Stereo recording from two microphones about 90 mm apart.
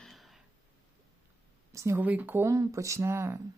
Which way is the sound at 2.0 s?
20° right (ahead or behind).